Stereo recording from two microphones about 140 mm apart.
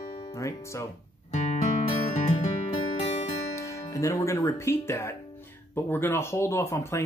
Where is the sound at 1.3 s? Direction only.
55° left (ahead or behind).